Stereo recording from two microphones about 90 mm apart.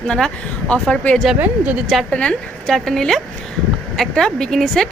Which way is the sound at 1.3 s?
20° right (ahead or behind).